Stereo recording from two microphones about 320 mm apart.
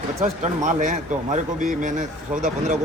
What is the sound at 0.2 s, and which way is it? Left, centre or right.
Speech, right.